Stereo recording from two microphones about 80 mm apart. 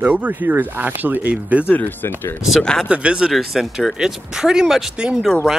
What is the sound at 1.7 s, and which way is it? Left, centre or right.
Speech, left.